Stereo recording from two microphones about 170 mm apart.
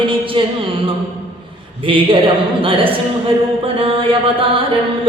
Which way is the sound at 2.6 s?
30° right (ahead or behind).